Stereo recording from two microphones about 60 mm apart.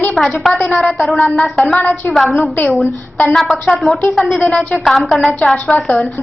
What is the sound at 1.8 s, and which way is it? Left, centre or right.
Speech, left.